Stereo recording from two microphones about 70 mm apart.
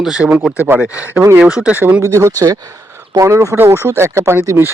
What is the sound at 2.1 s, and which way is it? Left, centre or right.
Speech, right.